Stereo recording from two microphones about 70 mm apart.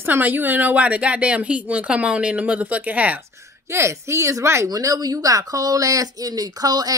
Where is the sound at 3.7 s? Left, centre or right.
Right.